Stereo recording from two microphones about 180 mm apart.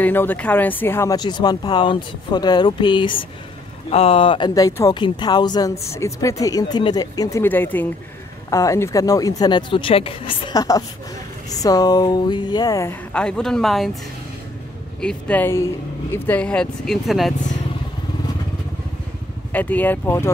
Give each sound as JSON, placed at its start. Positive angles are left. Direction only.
{"t": 0.0, "sound": "speech", "side_deg": 10}
{"t": 13.1, "sound": "speech", "side_deg": 5}
{"t": 15.0, "sound": "speech", "side_deg": 5}
{"t": 19.5, "sound": "speech", "side_deg": 10}